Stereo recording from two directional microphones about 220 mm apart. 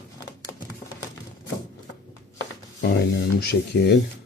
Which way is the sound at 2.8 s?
45° left (ahead or behind).